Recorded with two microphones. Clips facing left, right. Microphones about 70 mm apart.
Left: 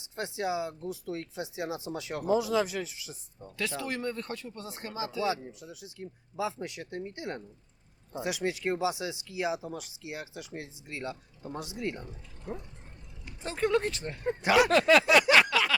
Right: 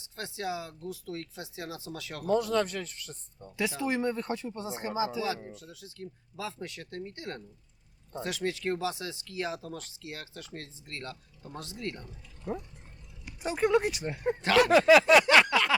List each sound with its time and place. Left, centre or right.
0.0 s speech: left
2.3 s speech: centre
3.6 s speech: centre
5.5 s speech: centre
13.2 s speech: centre
14.4 s speech: centre
14.7 s speech: centre
15.0 s a sound: centre
15.4 s a sound: centre